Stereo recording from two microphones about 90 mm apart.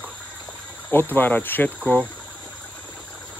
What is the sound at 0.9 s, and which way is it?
Speech, 25° left (ahead or behind).